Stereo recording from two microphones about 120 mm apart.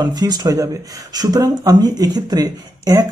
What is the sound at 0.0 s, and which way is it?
Speech, 35° right (ahead or behind).